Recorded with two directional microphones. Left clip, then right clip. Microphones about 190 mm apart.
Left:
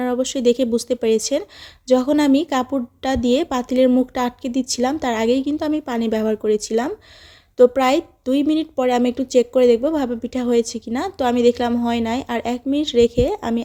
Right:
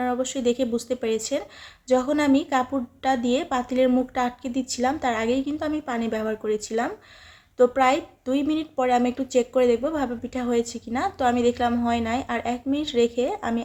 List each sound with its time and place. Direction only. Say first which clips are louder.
0.0 s a woman's voice: left 5 dB; 45° left (ahead or behind)